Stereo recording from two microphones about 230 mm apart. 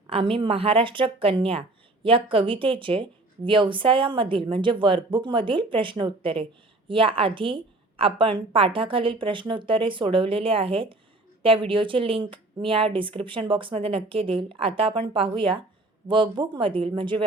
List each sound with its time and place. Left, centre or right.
0.1 s a woman's voice: right